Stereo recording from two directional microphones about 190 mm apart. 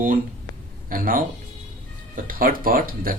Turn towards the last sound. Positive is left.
turn(degrees=-50)  # may be behind; listen again after turning